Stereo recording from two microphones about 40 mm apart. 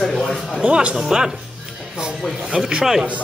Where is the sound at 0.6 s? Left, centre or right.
Right.